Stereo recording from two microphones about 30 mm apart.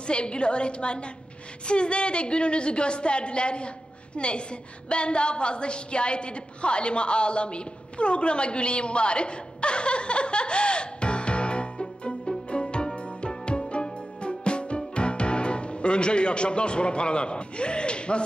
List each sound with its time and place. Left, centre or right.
0.0 s a woman's voice: left
12.4 s music: left
15.0 s speech: left